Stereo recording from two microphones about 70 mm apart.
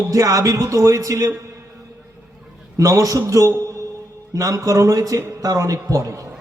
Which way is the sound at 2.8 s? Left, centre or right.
Right.